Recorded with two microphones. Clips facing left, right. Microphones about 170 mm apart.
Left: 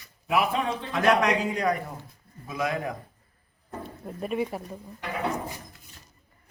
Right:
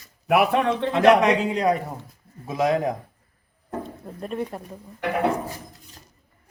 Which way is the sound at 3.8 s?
5° left (ahead or behind).